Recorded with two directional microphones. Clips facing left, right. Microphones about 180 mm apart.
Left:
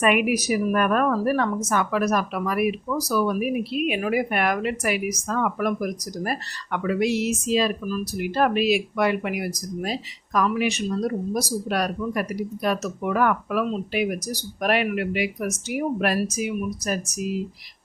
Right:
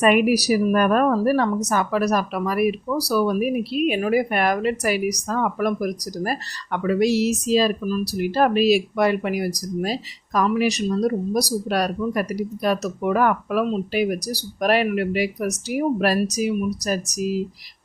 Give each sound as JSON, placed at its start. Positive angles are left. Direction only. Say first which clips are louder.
{"t": 0.0, "sound": "a woman's voice", "louder": "right 4 dB", "side_deg": -35}